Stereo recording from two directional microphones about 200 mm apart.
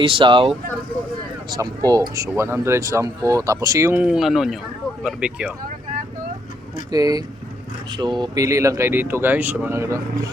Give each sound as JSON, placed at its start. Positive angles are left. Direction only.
{"t": 0.0, "sound": "speech", "side_deg": -25}
{"t": 6.9, "sound": "speech", "side_deg": -20}